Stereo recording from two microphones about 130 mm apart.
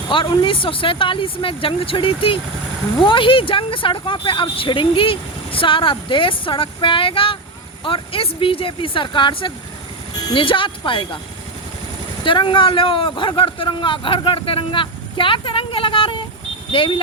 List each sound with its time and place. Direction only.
0.1 s speech: 40° left (ahead or behind)
12.2 s speech: 40° left (ahead or behind)